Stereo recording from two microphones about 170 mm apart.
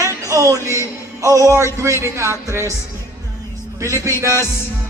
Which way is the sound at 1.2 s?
20° right (ahead or behind).